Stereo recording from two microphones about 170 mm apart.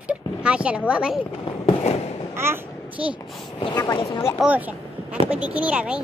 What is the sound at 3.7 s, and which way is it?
Speech, 25° left (ahead or behind).